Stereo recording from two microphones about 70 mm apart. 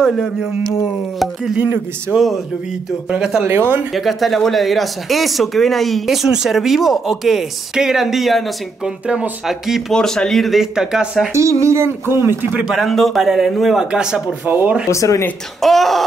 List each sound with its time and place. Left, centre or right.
0.0 s speech: centre
3.4 s speech: right
3.9 s speech: centre
9.0 s speech: centre
9.5 s speech: centre
9.9 s speech: centre
11.3 s speech: right
12.7 s speech: centre
14.4 s speech: right
14.9 s speech: left
15.6 s speech: centre